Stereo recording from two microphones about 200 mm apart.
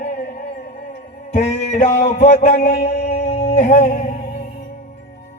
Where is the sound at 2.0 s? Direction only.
35° left (ahead or behind).